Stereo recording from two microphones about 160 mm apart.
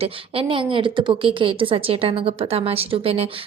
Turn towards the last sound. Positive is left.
turn(degrees=-35)  # may be behind; listen again after turning